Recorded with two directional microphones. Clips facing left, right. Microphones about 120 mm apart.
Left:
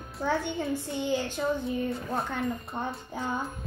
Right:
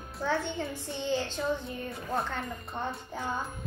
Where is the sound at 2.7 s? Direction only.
15° left (ahead or behind).